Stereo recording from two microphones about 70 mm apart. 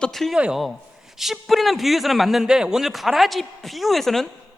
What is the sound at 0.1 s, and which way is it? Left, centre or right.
A man's voice, centre.